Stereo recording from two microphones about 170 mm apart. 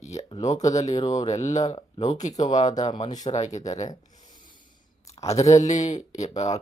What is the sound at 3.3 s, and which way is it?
Speech, 40° left (ahead or behind).